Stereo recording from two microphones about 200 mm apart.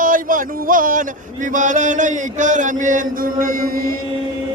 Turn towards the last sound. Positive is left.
turn(degrees=-45)  # may be behind; listen again after turning